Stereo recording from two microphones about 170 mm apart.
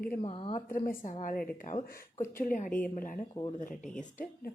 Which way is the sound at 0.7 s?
55° left (ahead or behind).